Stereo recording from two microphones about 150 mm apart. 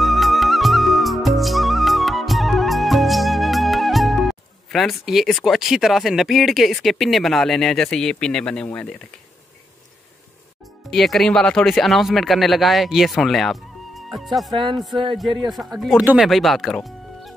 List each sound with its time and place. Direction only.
0.0 s music: centre (ahead or behind)
10.9 s speech: centre (ahead or behind)
14.5 s speech: 30° right (ahead or behind)
16.0 s speech: 10° right (ahead or behind)
16.3 s speech: centre (ahead or behind)